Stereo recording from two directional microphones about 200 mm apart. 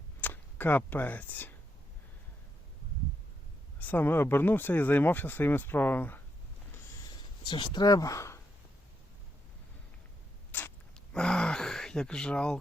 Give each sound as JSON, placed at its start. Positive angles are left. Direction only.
{"t": 0.2, "sound": "speech", "side_deg": 10}
{"t": 3.8, "sound": "speech", "side_deg": 10}
{"t": 7.4, "sound": "speech", "side_deg": 25}
{"t": 10.5, "sound": "gasp", "side_deg": 5}